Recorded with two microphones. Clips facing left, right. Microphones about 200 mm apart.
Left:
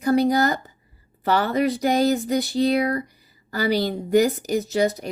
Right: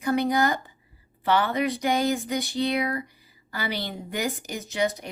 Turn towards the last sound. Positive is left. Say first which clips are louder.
# left 6 dB
turn(degrees=35)  # may be behind; listen again after turning